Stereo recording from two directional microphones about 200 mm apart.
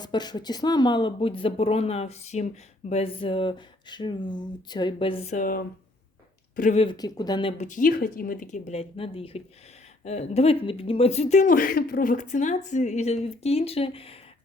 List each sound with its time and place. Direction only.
0.0 s speech: 20° left (ahead or behind); by 6.8 s 40° left (ahead or behind)
6.8 s speech: 20° left (ahead or behind)
7.6 s speech: 40° left (ahead or behind)